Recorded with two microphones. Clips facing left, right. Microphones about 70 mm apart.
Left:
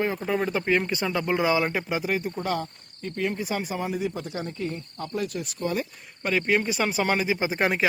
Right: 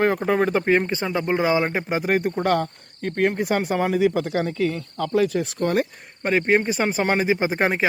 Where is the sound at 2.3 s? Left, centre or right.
Right.